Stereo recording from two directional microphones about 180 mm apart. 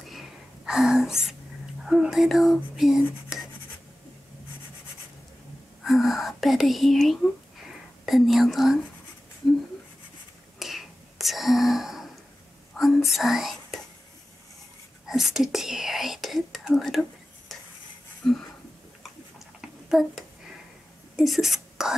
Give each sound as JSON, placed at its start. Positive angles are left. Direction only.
{"t": 0.0, "sound": "whispering", "side_deg": 0}
{"t": 1.8, "sound": "speech", "side_deg": 0}
{"t": 5.9, "sound": "speech", "side_deg": 0}
{"t": 10.6, "sound": "whispering", "side_deg": 0}
{"t": 12.7, "sound": "speech", "side_deg": 0}
{"t": 15.0, "sound": "speech", "side_deg": 0}
{"t": 17.5, "sound": "stir", "side_deg": 0}
{"t": 18.2, "sound": "speech", "side_deg": 0}
{"t": 19.9, "sound": "speech", "side_deg": 0}